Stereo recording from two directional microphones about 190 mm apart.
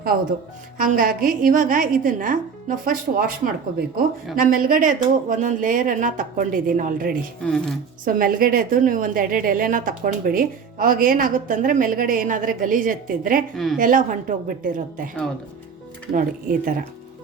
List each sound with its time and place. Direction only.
0.8 s a woman's voice: 45° right (ahead or behind)
7.4 s speech: 5° left (ahead or behind)
8.0 s a woman's voice: 50° right (ahead or behind)
16.1 s a woman's voice: 45° right (ahead or behind)